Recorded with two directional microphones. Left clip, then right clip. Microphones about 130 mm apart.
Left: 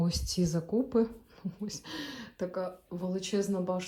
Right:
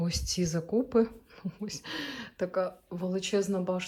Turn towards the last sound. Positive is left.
turn(degrees=15)  # may be behind; listen again after turning